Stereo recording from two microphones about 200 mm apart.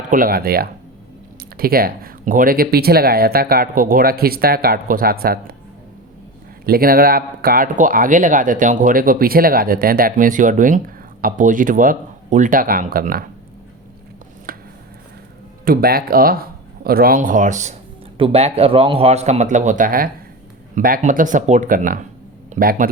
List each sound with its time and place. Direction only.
0.1 s speech: 45° right (ahead or behind)
6.7 s speech: 45° right (ahead or behind)
14.5 s a sound: 45° right (ahead or behind)
15.6 s speech: 50° right (ahead or behind)